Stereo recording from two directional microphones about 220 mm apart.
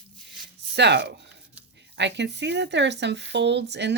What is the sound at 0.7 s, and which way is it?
Speech, 50° right (ahead or behind).